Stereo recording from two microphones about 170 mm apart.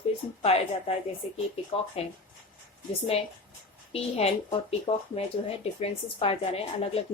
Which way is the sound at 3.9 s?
35° left (ahead or behind).